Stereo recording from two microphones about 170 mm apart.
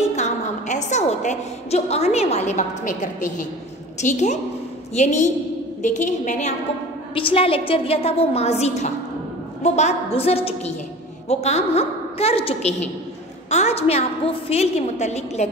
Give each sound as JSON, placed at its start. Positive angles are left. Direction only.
{"t": 0.1, "sound": "a woman's voice", "side_deg": 45}
{"t": 7.2, "sound": "a woman's voice", "side_deg": 30}